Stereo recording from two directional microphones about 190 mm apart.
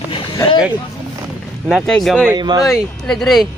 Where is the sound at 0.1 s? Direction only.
25° left (ahead or behind).